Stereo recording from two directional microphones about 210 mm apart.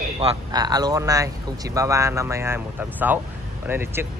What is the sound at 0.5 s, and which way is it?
Speech, 20° right (ahead or behind).